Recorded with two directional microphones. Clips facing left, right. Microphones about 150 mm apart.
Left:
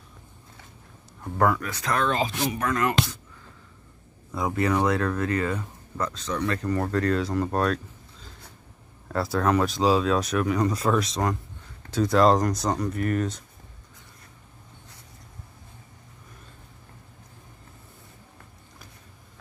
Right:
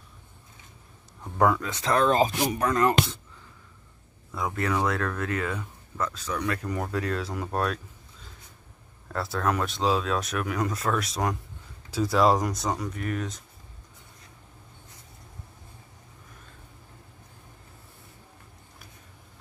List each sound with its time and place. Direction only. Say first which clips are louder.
1.4 s speech: even; 20° right (ahead or behind); by 2.3 s 40° right (ahead or behind)
2.6 s speech: right 2 dB; 25° right (ahead or behind)
4.4 s speech: left 3 dB; 5° left (ahead or behind)